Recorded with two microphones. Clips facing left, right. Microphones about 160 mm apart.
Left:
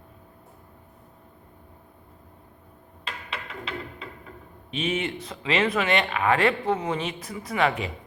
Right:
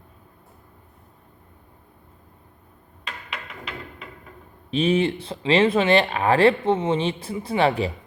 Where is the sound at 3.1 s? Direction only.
30° left (ahead or behind).